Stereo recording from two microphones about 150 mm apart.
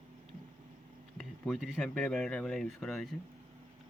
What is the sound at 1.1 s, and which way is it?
Speech, 5° left (ahead or behind).